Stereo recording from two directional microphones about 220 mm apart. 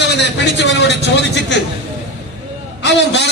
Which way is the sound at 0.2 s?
50° left (ahead or behind).